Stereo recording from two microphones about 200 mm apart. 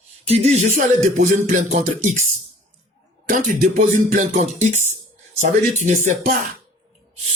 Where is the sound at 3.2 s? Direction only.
40° right (ahead or behind).